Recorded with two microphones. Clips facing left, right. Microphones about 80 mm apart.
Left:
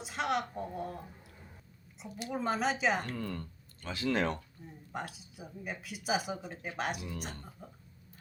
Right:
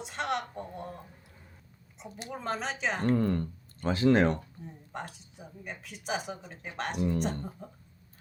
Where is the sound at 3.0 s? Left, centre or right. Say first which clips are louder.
Right 12 dB; right.